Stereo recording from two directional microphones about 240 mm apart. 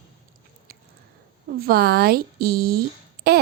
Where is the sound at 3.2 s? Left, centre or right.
Right.